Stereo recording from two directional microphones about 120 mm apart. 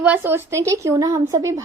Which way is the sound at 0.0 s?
15° right (ahead or behind).